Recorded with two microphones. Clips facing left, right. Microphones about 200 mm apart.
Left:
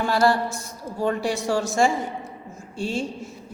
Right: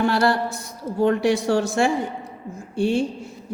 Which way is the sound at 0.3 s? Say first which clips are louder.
Even; 60° right (ahead or behind).